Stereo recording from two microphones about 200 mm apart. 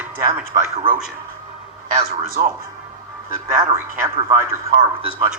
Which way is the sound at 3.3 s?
15° right (ahead or behind).